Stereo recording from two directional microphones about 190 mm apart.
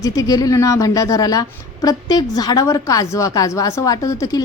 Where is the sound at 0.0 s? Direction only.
20° left (ahead or behind).